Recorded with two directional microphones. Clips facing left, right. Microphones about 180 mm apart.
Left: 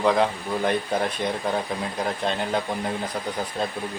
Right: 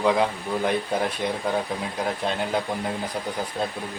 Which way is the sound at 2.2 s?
5° right (ahead or behind).